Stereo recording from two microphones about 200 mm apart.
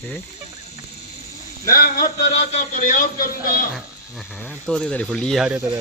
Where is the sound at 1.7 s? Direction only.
50° left (ahead or behind).